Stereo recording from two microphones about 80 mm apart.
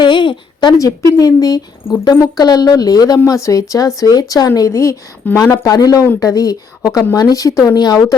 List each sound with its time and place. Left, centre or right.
0.0 s a sound: left
1.2 s speech: left
5.2 s speech: left
5.6 s speech: left